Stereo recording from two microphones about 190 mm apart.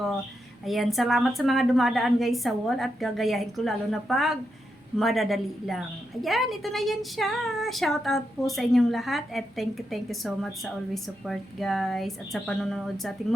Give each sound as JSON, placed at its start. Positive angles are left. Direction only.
{"t": 0.6, "sound": "a woman's voice", "side_deg": 0}